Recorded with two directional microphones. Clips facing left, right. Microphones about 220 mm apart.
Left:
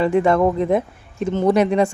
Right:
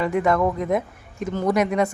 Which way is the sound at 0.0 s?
30° left (ahead or behind).